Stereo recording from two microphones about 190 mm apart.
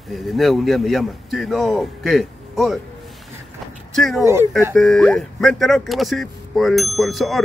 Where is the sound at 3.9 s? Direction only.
Centre (ahead or behind).